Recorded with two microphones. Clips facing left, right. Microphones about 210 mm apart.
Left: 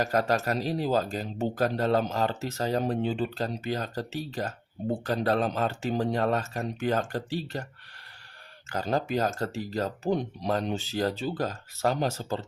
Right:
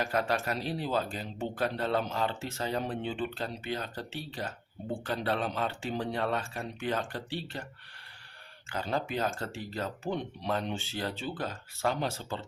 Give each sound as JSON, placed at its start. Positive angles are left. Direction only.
{"t": 0.0, "sound": "speech", "side_deg": 40}
{"t": 8.7, "sound": "speech", "side_deg": 40}